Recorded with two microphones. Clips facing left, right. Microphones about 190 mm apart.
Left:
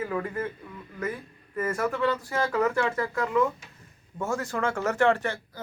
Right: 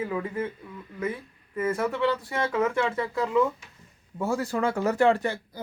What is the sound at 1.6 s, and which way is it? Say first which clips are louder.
Speech: right 1 dB; 5° right (ahead or behind).